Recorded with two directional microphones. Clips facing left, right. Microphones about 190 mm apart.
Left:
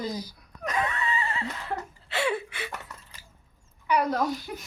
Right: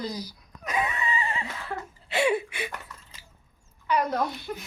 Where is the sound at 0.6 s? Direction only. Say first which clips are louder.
Even; 10° right (ahead or behind).